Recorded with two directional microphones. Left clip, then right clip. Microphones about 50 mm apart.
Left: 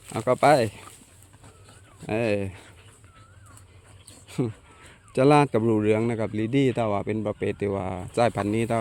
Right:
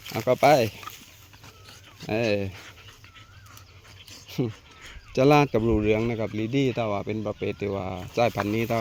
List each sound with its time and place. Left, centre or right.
0.3 s speech: centre
2.0 s speech: centre
4.3 s a sound: centre
5.7 s speech: left
6.3 s speech: left
7.7 s speech: left
8.3 s speech: left